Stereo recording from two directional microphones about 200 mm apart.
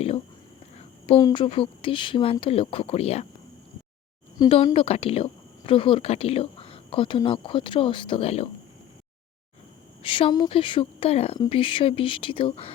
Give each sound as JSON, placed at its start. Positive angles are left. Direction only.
{"t": 0.8, "sound": "speech", "side_deg": 25}
{"t": 4.4, "sound": "speech", "side_deg": 25}
{"t": 10.0, "sound": "speech", "side_deg": 25}